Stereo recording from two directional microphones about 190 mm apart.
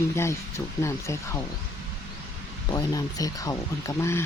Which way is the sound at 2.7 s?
20° left (ahead or behind).